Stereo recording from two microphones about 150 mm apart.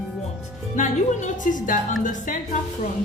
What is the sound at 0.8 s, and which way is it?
Speech, 55° left (ahead or behind).